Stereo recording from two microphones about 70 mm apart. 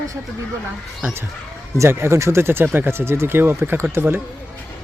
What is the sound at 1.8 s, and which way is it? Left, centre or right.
Speech, right.